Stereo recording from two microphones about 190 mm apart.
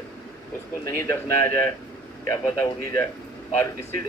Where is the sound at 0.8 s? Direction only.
15° left (ahead or behind).